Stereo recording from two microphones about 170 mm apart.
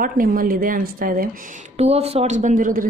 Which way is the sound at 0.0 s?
55° right (ahead or behind).